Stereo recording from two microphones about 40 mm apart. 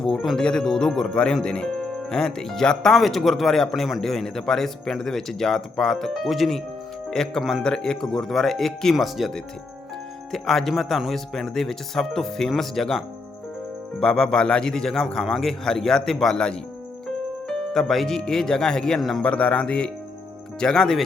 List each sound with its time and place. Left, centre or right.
0.0 s speech: centre
3.0 s a man's voice: centre
7.1 s speech: centre
10.3 s speech: centre
14.0 s speech: centre
17.5 s music: centre
18.2 s speech: centre
18.9 s a man's voice: centre
19.2 s a man's voice: left; by 21.0 s centre